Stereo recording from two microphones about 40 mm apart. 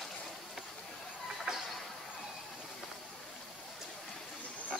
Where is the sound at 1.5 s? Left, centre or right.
Centre.